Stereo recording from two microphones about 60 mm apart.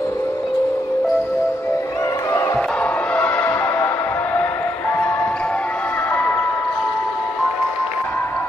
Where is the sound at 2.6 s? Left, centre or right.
Left.